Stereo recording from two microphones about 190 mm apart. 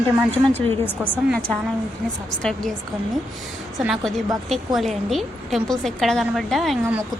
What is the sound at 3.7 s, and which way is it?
A woman's voice, centre (ahead or behind).